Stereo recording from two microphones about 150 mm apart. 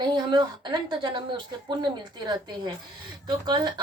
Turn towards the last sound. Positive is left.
turn(degrees=-30)  # may be behind; listen again after turning